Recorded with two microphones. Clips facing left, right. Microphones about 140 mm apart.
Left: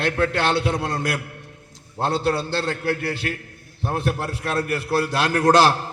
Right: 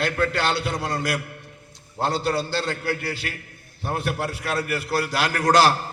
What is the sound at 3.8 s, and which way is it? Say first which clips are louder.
A man's voice: left 2 dB; 25° left (ahead or behind).